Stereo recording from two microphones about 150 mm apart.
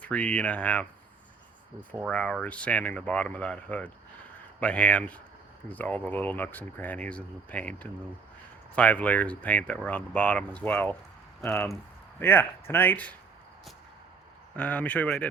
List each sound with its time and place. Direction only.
0.0 s speech: 10° left (ahead or behind)
2.0 s speech: 5° left (ahead or behind)
14.5 s speech: 10° left (ahead or behind)